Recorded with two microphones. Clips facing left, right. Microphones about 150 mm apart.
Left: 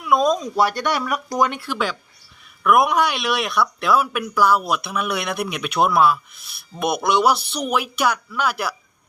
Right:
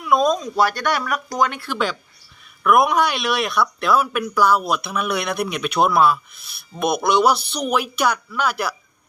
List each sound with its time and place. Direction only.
0.0 s speech: 5° left (ahead or behind)
0.6 s speech: 25° left (ahead or behind)
1.6 s speech: 5° left (ahead or behind)